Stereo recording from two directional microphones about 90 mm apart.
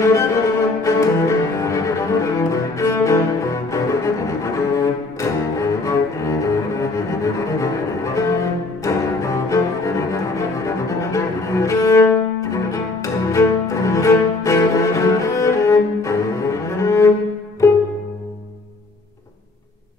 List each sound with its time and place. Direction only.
0.0 s cello: 35° left (ahead or behind)
17.6 s music: 30° left (ahead or behind)